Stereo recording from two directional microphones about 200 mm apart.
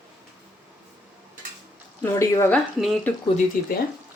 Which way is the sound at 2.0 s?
15° left (ahead or behind).